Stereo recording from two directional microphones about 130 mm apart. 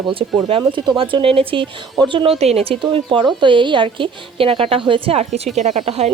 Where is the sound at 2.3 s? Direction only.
55° right (ahead or behind).